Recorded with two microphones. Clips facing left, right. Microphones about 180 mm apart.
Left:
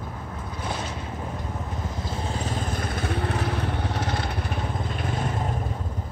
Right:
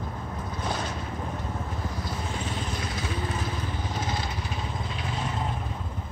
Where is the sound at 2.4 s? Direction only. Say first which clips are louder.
Left 3 dB; 50° left (ahead or behind).